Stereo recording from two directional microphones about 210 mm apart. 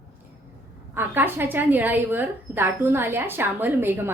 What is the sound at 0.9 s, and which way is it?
A woman's voice, 10° right (ahead or behind).